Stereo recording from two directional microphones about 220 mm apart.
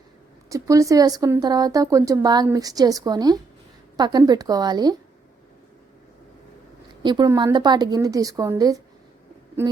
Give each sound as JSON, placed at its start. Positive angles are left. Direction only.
{"t": 0.5, "sound": "speech", "side_deg": -15}
{"t": 7.0, "sound": "speech", "side_deg": -20}